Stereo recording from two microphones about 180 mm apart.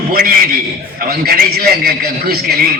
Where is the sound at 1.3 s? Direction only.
55° right (ahead or behind).